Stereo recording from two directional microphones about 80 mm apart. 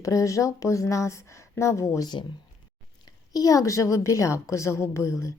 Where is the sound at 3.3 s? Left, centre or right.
Left.